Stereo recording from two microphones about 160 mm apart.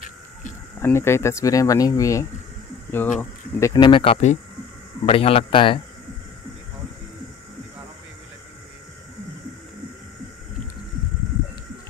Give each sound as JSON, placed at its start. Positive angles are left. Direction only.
{"t": 0.0, "sound": "a sound", "side_deg": 50}
{"t": 0.7, "sound": "speech", "side_deg": 15}
{"t": 3.9, "sound": "a man's voice", "side_deg": 35}